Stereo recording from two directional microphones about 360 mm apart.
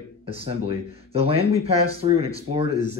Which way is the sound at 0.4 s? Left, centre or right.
Centre.